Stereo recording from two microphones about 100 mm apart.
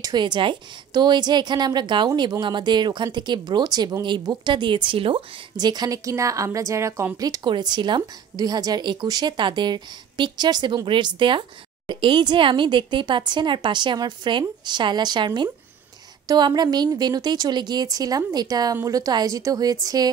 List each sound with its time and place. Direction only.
0.0 s a woman's voice: 45° right (ahead or behind)
5.6 s a woman's voice: 45° right (ahead or behind)